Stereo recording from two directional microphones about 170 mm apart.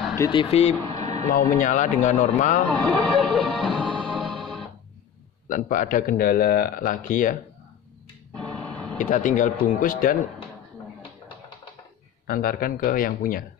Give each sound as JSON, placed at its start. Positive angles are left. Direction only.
{"t": 0.2, "sound": "speech", "side_deg": 30}
{"t": 0.8, "sound": "a sound", "side_deg": -40}
{"t": 1.5, "sound": "a man's voice", "side_deg": 50}
{"t": 2.6, "sound": "speech", "side_deg": 10}
{"t": 4.0, "sound": "music", "side_deg": -5}
{"t": 5.5, "sound": "a man's voice", "side_deg": 50}
{"t": 8.4, "sound": "a sound", "side_deg": 0}
{"t": 9.0, "sound": "a man's voice", "side_deg": 50}
{"t": 12.3, "sound": "a man's voice", "side_deg": 60}